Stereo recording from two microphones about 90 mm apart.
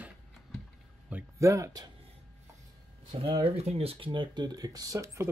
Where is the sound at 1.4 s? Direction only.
35° right (ahead or behind).